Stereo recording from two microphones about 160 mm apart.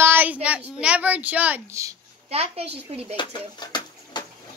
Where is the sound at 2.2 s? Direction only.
40° right (ahead or behind).